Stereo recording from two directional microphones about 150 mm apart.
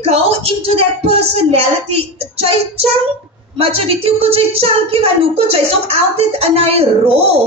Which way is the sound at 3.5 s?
40° right (ahead or behind).